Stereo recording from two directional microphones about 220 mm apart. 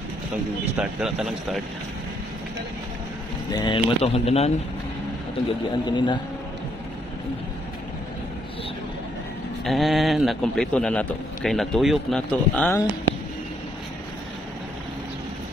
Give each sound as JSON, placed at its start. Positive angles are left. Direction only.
{"t": 0.7, "sound": "a man's voice", "side_deg": 0}
{"t": 3.5, "sound": "speech", "side_deg": 20}
{"t": 5.9, "sound": "speech", "side_deg": 20}
{"t": 9.7, "sound": "a man's voice", "side_deg": 0}